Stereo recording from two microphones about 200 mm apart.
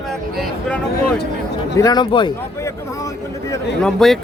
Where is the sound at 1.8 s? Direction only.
20° left (ahead or behind).